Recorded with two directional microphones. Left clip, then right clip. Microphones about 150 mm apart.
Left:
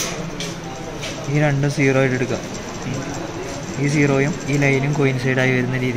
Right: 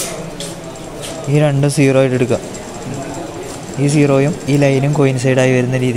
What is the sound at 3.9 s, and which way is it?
Speech, 55° right (ahead or behind).